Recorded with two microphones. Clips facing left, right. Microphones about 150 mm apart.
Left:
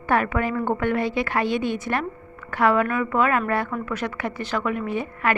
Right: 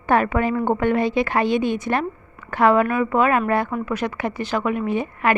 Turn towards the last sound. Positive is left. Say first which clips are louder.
# right 3 dB
turn(degrees=-20)  # may be behind; listen again after turning